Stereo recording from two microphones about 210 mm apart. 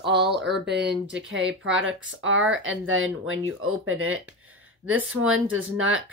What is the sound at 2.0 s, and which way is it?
Speech, 65° right (ahead or behind).